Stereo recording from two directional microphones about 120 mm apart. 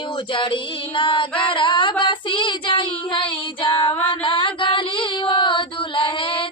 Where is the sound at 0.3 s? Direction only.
45° left (ahead or behind).